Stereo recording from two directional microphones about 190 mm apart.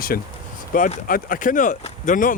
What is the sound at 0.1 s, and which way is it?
Speech, 50° left (ahead or behind).